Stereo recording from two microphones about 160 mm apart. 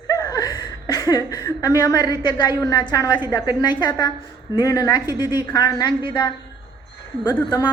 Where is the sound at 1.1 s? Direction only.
25° left (ahead or behind).